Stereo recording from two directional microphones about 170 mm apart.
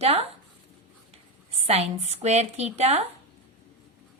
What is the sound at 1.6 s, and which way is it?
Speech, 40° right (ahead or behind).